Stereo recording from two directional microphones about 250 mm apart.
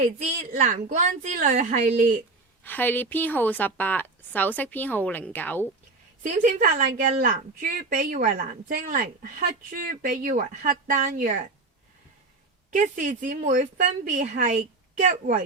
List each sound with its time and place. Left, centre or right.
0.0 s a woman's voice: right
2.6 s speech: centre
6.2 s speech: right
12.7 s speech: right